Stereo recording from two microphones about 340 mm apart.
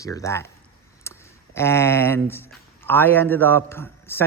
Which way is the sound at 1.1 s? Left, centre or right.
Centre.